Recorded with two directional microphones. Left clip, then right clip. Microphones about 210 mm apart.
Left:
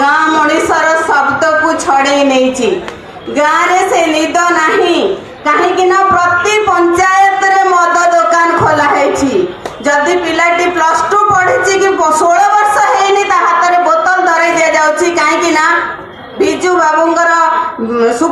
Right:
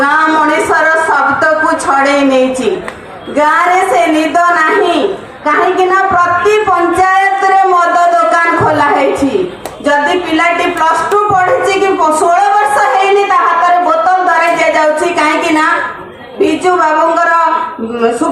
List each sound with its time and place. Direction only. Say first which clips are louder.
0.0 s music: even; 50° left (ahead or behind)
1.4 s a sound: even; 50° left (ahead or behind)
5.9 s music: left 1 dB; 45° left (ahead or behind)
7.9 s a sound: even; 45° left (ahead or behind)
10.8 s music: even; 45° left (ahead or behind)
11.9 s speech: even; 45° left (ahead or behind)
16.6 s speech: even; 45° left (ahead or behind)